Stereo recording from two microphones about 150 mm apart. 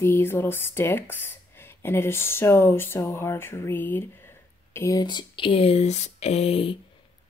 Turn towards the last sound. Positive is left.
turn(degrees=40)  # may be behind; listen again after turning